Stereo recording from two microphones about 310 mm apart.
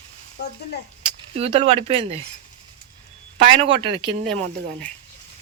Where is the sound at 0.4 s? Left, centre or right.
Left.